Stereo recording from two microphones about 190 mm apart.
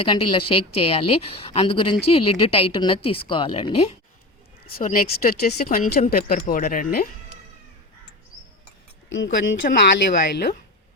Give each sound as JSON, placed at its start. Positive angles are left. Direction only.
{"t": 0.0, "sound": "a woman's voice", "side_deg": 25}
{"t": 4.8, "sound": "speech", "side_deg": 40}
{"t": 8.6, "sound": "a sound", "side_deg": 85}